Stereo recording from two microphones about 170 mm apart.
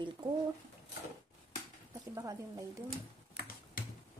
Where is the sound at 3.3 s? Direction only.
55° left (ahead or behind).